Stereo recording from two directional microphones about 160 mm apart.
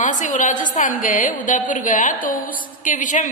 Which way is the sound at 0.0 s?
50° left (ahead or behind).